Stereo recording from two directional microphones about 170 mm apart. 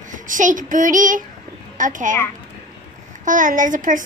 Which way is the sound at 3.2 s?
50° right (ahead or behind).